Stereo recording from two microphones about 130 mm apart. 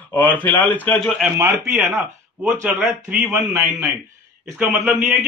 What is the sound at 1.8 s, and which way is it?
Speech, 15° right (ahead or behind).